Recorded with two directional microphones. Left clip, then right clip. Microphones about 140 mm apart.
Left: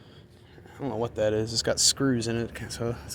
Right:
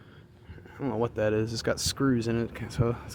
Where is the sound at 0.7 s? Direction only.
40° right (ahead or behind).